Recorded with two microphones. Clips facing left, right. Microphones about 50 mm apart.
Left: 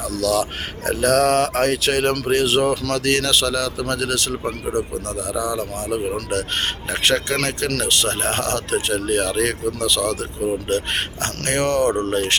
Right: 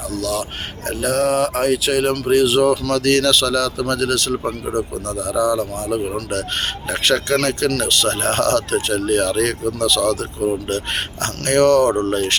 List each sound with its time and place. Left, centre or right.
0.2 s a sound: left
1.4 s speech: left
2.9 s speech: left